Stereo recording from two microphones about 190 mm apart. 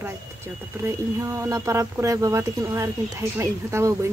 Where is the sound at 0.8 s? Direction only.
15° right (ahead or behind).